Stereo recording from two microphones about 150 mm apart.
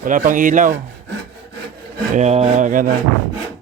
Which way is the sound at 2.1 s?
50° right (ahead or behind).